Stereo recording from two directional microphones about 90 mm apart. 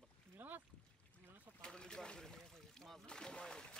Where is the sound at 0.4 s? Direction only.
20° right (ahead or behind).